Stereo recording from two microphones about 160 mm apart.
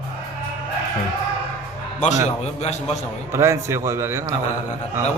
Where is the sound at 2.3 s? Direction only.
45° left (ahead or behind).